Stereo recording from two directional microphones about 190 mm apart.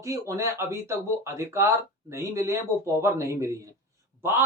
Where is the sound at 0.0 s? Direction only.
15° right (ahead or behind).